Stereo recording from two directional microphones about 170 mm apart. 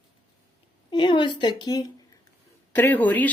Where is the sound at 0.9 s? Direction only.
30° left (ahead or behind).